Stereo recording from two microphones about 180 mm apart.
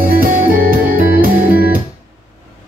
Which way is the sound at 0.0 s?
50° right (ahead or behind).